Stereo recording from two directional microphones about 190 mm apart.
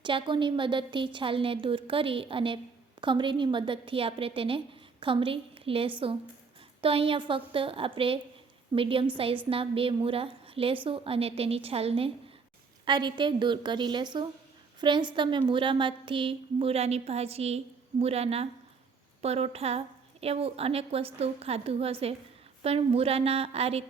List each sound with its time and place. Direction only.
0.0 s a woman's voice: 25° right (ahead or behind)